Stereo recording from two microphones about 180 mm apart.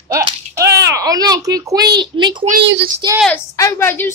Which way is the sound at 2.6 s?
75° right (ahead or behind).